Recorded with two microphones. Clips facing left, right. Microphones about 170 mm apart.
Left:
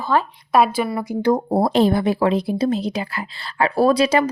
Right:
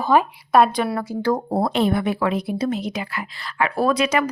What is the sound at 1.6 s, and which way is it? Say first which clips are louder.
A woman's voice: left 4 dB; 35° left (ahead or behind).